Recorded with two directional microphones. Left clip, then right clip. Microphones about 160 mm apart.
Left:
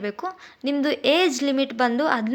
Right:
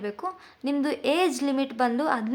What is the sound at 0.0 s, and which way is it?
A woman's voice, 15° left (ahead or behind).